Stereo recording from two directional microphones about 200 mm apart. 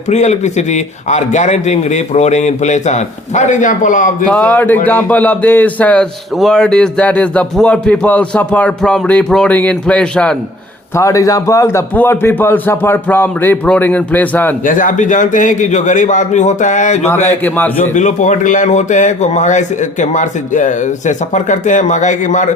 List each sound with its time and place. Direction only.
0.1 s speech: 35° left (ahead or behind)
4.3 s a man's voice: 5° left (ahead or behind)
10.9 s a man's voice: 15° left (ahead or behind)
14.6 s speech: 40° left (ahead or behind)